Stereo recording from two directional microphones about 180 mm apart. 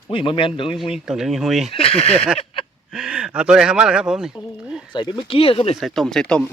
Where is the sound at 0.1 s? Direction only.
30° left (ahead or behind).